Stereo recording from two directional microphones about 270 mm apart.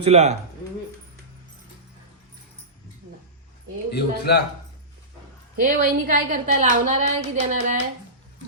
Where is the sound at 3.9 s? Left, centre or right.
Left.